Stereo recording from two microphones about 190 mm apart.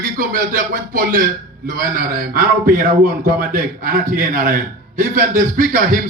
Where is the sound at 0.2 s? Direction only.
45° right (ahead or behind).